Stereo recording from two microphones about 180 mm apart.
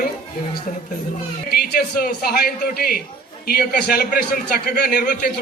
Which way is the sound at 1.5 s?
60° left (ahead or behind).